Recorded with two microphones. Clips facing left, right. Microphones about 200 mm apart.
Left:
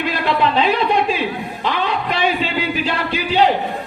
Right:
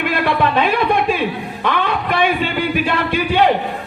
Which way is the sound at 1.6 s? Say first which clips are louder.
Right 2 dB; 55° right (ahead or behind).